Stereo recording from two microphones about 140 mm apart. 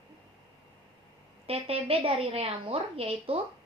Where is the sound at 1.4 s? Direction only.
45° right (ahead or behind).